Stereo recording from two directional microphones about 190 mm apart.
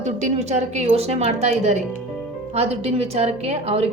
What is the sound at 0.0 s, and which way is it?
A woman's voice, 40° right (ahead or behind).